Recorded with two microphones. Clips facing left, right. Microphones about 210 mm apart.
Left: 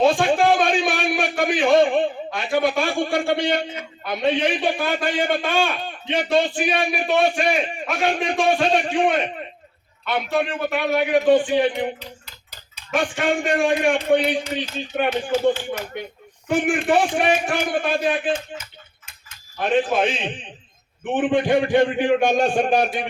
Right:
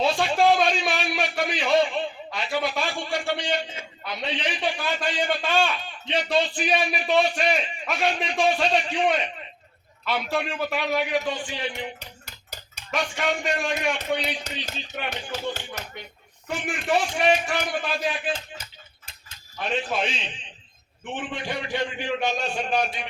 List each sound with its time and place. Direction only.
0.0 s a man's voice: 50° left (ahead or behind)
10.2 s a man's voice: centre (ahead or behind)
11.0 s a man's voice: 55° left (ahead or behind)
12.2 s a sound: 45° right (ahead or behind)
13.0 s a man's voice: 50° left (ahead or behind)
15.9 s a man's voice: 55° left (ahead or behind)
19.5 s a man's voice: 55° left (ahead or behind)